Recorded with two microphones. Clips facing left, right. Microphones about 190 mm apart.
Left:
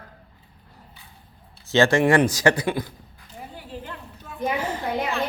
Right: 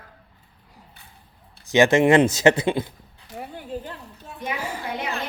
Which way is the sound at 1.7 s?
20° right (ahead or behind).